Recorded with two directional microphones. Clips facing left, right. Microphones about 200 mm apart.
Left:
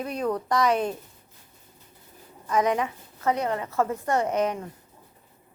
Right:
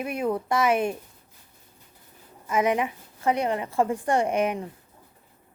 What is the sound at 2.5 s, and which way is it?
A woman's voice, 10° right (ahead or behind).